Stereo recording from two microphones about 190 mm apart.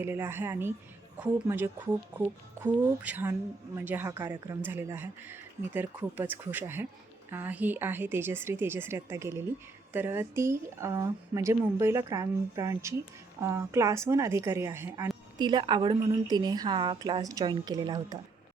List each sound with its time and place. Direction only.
0.0 s a woman's voice: 10° right (ahead or behind)